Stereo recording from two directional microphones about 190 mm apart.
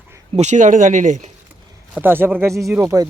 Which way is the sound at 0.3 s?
40° right (ahead or behind).